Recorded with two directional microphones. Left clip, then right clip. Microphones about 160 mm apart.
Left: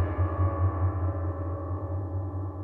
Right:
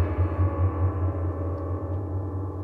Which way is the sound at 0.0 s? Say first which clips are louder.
Right 2 dB; 25° left (ahead or behind).